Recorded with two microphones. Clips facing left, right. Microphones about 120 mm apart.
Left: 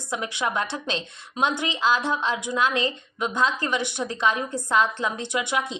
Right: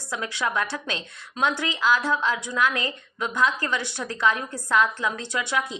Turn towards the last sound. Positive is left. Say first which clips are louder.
# left 1 dB
turn(degrees=20)  # may be behind; listen again after turning